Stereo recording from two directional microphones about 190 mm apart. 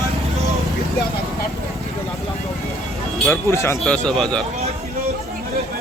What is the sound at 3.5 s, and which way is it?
Speech, 15° left (ahead or behind).